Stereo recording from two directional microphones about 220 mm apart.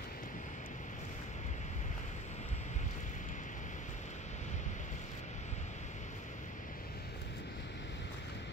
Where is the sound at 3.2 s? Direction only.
35° left (ahead or behind).